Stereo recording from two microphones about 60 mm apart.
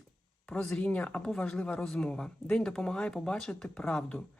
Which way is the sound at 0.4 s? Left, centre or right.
Centre.